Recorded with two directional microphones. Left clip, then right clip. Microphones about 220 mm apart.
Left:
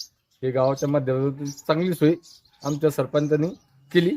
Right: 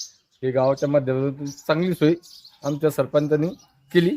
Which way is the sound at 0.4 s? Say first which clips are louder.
Right 2 dB; 10° right (ahead or behind).